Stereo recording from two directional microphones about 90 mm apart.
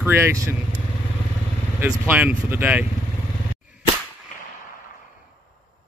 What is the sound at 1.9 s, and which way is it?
Speech, 15° right (ahead or behind).